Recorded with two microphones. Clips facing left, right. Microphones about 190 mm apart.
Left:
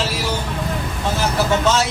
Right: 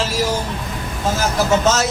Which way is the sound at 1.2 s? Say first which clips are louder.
Right 1 dB; 45° right (ahead or behind).